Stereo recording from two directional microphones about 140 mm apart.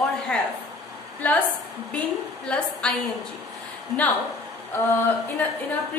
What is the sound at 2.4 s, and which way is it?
Speech, 5° left (ahead or behind).